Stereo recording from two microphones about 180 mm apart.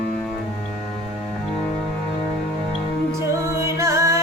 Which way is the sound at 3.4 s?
15° right (ahead or behind).